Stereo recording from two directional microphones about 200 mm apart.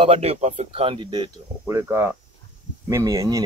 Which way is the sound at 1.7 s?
10° right (ahead or behind).